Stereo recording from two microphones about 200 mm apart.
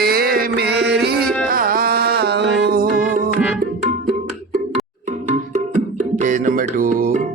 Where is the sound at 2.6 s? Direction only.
50° right (ahead or behind).